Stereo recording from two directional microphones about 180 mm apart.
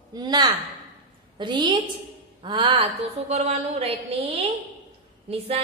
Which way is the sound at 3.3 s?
35° right (ahead or behind).